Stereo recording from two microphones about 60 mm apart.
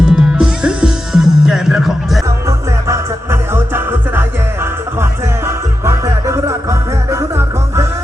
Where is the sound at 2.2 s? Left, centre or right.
Right.